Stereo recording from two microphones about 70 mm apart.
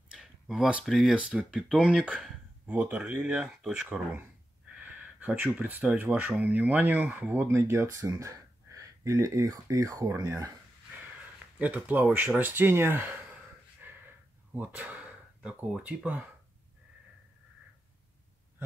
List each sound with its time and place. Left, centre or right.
0.2 s a sound: centre
0.8 s speech: centre
1.1 s speech: centre
4.7 s a sound: right
6.1 s speech: right
7.4 s speech: right
7.9 s speech: right
11.5 s speech: right
13.8 s a sound: right
15.8 s speech: centre